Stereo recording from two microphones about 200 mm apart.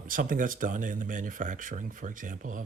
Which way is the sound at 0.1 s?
45° right (ahead or behind).